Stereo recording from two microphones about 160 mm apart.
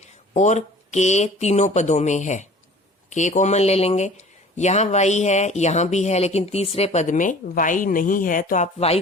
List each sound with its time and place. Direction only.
0.3 s a man's voice: 50° left (ahead or behind)